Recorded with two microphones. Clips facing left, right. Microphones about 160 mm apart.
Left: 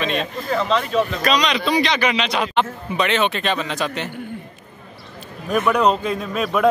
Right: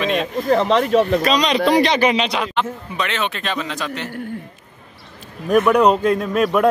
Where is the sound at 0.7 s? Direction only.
60° right (ahead or behind).